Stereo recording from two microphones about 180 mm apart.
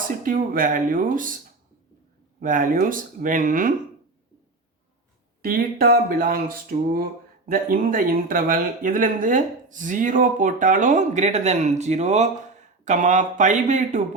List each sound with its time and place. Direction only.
0.2 s speech: 50° right (ahead or behind)
2.4 s speech: 50° right (ahead or behind)
5.4 s speech: 55° right (ahead or behind)